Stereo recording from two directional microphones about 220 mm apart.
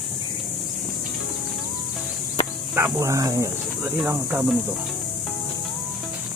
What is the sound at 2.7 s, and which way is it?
Snake, 10° right (ahead or behind).